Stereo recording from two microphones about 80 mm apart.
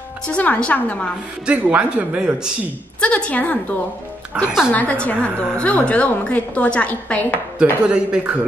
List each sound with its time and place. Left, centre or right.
0.3 s a woman's voice: centre
1.4 s speech: centre
3.0 s a woman's voice: centre
4.3 s speech: centre
4.7 s a woman's voice: centre
7.8 s speech: centre